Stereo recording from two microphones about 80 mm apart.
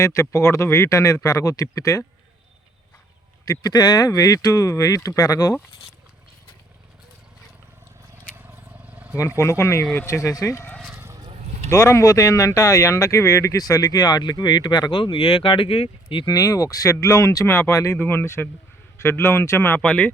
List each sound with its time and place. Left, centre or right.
0.0 s speech: left
3.4 s speech: left
8.4 s vehicle: centre
9.1 s speech: left
11.7 s speech: left
16.0 s speech: left
17.4 s speech: left
17.9 s speech: left
19.8 s speech: centre